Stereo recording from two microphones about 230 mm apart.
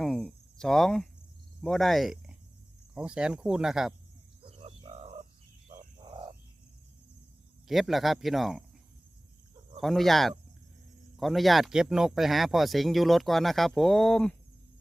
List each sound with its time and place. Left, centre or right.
0.0 s cricket: centre
1.6 s speech: centre
4.4 s bird: right
5.6 s wild animals: right
7.7 s speech: centre
9.8 s speech: centre